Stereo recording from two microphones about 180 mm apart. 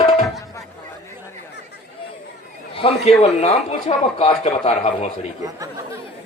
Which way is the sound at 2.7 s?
30° left (ahead or behind).